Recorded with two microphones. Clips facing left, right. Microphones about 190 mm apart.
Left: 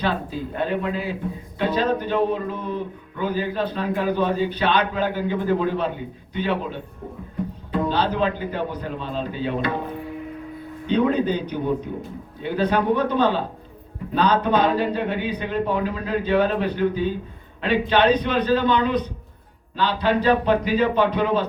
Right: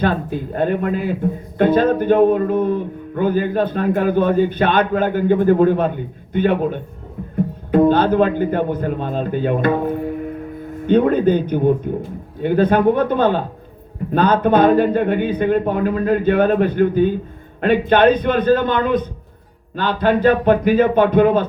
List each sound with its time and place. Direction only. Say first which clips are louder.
0.0 s a man's voice: right 5 dB; 50° right (ahead or behind)